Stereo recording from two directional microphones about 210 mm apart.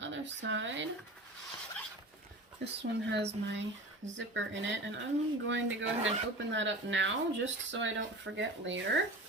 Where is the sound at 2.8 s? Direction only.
55° right (ahead or behind).